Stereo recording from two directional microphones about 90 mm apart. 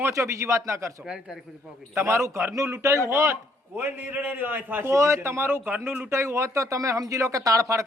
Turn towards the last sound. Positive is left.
turn(degrees=-35)  # may be behind; listen again after turning